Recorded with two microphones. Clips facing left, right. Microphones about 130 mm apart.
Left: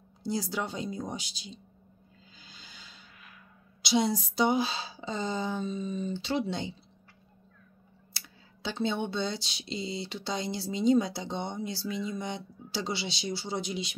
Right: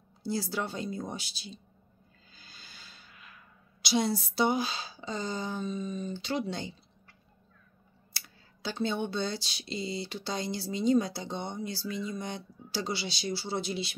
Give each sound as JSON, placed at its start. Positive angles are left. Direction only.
{"t": 0.2, "sound": "speech", "side_deg": 20}
{"t": 2.3, "sound": "music", "side_deg": 20}
{"t": 3.8, "sound": "speech", "side_deg": 20}
{"t": 8.6, "sound": "speech", "side_deg": 25}